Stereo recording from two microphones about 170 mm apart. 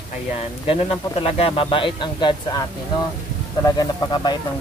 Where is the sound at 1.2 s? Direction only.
35° left (ahead or behind).